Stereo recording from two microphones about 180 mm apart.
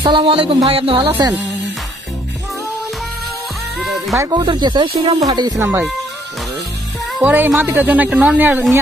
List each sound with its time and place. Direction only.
0.0 s music: 30° right (ahead or behind)
4.1 s speech: 20° right (ahead or behind)
4.9 s music: 35° right (ahead or behind)
5.2 s a woman's voice: 20° right (ahead or behind)
7.2 s a woman's voice: 10° right (ahead or behind)